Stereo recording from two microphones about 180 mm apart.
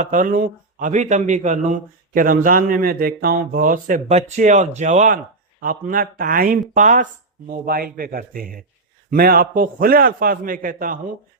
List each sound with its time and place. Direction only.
0.0 s speech: 50° right (ahead or behind)